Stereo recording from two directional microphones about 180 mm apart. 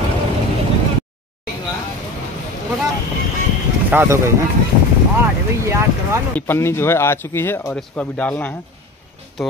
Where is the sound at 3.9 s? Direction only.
10° right (ahead or behind).